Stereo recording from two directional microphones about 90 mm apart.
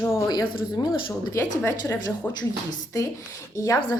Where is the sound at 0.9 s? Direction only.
30° left (ahead or behind).